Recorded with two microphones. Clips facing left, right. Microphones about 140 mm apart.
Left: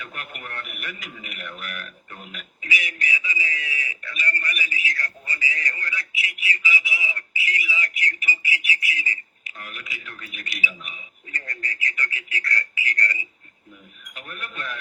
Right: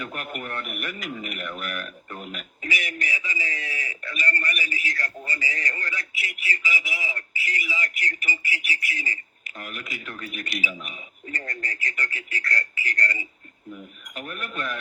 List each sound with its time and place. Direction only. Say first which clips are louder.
0.0 s speech: right 5 dB; 45° right (ahead or behind)